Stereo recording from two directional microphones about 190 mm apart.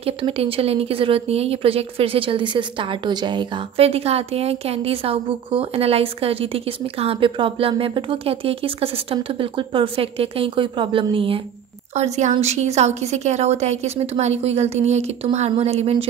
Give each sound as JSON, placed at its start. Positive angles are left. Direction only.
{"t": 0.0, "sound": "a woman's voice", "side_deg": -30}